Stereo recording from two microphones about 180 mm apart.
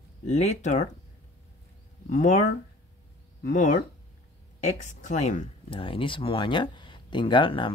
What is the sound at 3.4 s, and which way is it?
Speech, 45° left (ahead or behind).